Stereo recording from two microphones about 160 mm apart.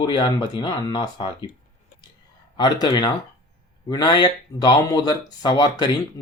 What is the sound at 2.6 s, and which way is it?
Speech, 25° left (ahead or behind).